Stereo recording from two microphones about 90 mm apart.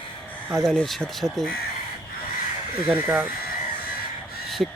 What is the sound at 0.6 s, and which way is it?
Speech, 5° left (ahead or behind).